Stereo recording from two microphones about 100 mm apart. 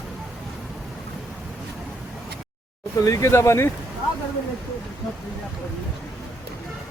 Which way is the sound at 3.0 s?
30° left (ahead or behind).